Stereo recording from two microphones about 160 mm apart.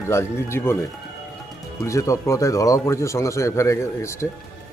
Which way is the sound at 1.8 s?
20° left (ahead or behind).